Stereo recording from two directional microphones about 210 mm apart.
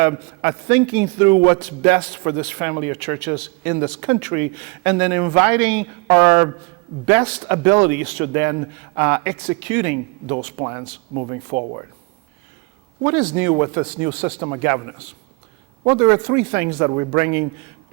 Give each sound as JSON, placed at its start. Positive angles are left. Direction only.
{"t": 0.0, "sound": "a man's voice", "side_deg": -15}
{"t": 3.0, "sound": "a man's voice", "side_deg": 5}
{"t": 3.6, "sound": "speech", "side_deg": -20}
{"t": 5.5, "sound": "a man's voice", "side_deg": 5}
{"t": 6.1, "sound": "a man's voice", "side_deg": -10}
{"t": 11.1, "sound": "speech", "side_deg": -30}
{"t": 13.0, "sound": "a man's voice", "side_deg": -20}
{"t": 15.9, "sound": "speech", "side_deg": -15}